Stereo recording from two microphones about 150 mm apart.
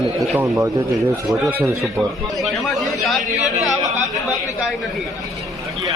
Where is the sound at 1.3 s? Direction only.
5° right (ahead or behind).